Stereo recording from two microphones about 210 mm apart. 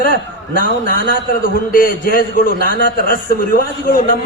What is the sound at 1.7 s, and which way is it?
A man's voice, 45° left (ahead or behind).